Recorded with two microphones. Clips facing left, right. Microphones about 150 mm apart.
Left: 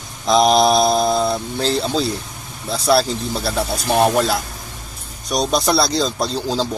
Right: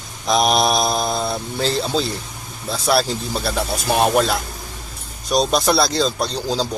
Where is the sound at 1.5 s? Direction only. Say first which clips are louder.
Right 1 dB; centre (ahead or behind).